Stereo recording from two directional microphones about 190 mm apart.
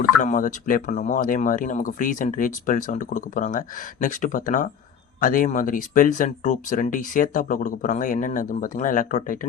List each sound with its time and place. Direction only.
0.2 s speech: 40° left (ahead or behind)